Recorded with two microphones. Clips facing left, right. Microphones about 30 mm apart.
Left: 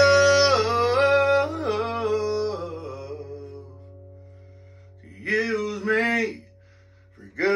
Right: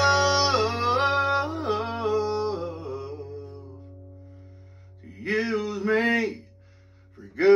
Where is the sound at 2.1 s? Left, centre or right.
Left.